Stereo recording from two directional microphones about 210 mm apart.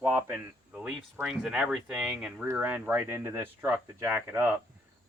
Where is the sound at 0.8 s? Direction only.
5° right (ahead or behind).